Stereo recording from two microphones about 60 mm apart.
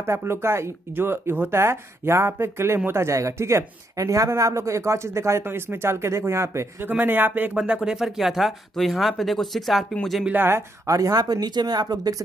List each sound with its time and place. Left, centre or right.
0.0 s speech: right
5.4 s speech: right
6.8 s speech: right
7.5 s speech: centre
10.3 s speech: right
10.9 s speech: right